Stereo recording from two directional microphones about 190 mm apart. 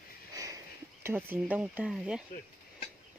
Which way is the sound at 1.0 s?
10° right (ahead or behind).